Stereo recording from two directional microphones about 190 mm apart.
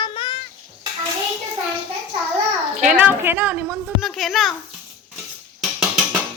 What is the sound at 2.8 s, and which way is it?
A woman's voice, 5° right (ahead or behind).